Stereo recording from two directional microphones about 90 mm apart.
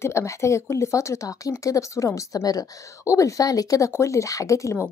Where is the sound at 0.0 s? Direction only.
35° left (ahead or behind).